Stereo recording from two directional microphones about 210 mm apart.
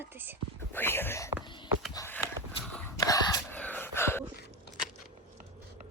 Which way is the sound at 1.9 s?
10° left (ahead or behind).